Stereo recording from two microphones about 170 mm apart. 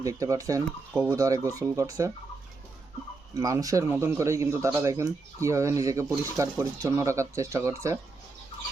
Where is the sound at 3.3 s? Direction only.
20° right (ahead or behind).